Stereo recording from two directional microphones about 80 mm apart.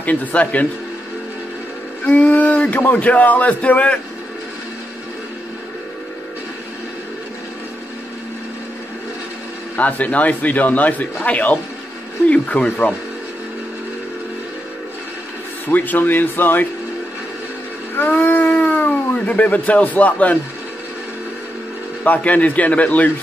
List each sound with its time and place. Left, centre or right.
0.0 s speech: centre
2.0 s speech: centre
9.8 s speech: centre
15.7 s speech: left
17.9 s a sound: left
22.0 s speech: left